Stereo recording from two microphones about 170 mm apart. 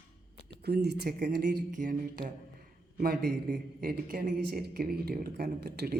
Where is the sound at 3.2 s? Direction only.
60° right (ahead or behind).